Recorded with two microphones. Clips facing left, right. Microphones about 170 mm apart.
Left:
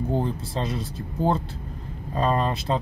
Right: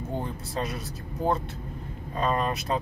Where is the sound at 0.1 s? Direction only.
30° left (ahead or behind).